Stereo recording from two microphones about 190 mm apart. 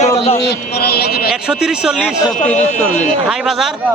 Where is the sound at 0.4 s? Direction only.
55° left (ahead or behind).